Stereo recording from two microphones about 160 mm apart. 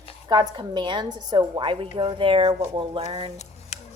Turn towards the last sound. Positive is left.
turn(degrees=-35)  # may be behind; listen again after turning